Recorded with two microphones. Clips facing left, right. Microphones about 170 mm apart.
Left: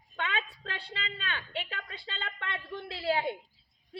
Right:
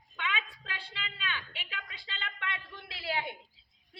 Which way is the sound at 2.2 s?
40° left (ahead or behind).